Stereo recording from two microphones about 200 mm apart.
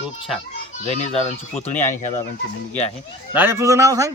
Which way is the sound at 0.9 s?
35° left (ahead or behind).